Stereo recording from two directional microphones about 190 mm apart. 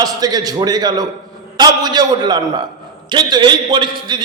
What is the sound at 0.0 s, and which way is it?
A man's voice, 20° right (ahead or behind).